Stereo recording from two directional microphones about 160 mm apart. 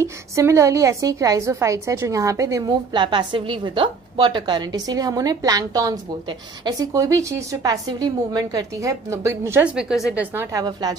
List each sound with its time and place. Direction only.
0.0 s a woman's voice: 20° right (ahead or behind)
9.8 s speech: 5° right (ahead or behind)
10.3 s a woman's voice: 25° right (ahead or behind)